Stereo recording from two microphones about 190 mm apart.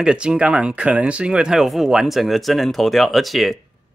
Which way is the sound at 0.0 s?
5° right (ahead or behind).